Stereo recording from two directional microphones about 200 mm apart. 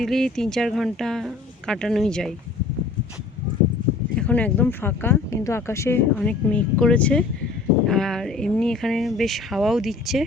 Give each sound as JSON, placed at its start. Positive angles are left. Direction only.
{"t": 0.0, "sound": "speech", "side_deg": 0}
{"t": 4.1, "sound": "speech", "side_deg": 5}